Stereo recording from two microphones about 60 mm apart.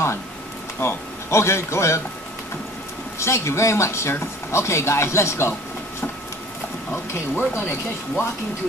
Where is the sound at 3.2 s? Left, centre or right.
Left.